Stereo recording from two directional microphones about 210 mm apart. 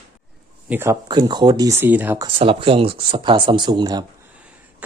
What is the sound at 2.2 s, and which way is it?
Speech, 25° right (ahead or behind).